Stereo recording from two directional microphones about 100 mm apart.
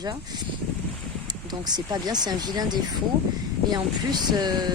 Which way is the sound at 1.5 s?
45° right (ahead or behind).